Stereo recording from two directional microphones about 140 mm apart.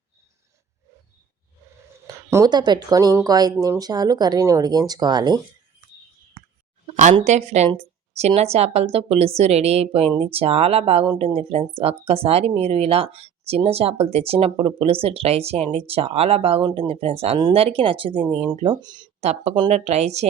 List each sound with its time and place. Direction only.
2.0 s speech: 20° right (ahead or behind)
6.9 s a sound: 60° right (ahead or behind)
7.3 s speech: 50° right (ahead or behind)
7.8 s a sound: 50° right (ahead or behind)
8.4 s speech: 50° right (ahead or behind); by 19.0 s 30° right (ahead or behind)
19.2 s speech: 50° right (ahead or behind)